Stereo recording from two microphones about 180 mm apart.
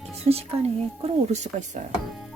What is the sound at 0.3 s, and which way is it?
Speech, 35° right (ahead or behind).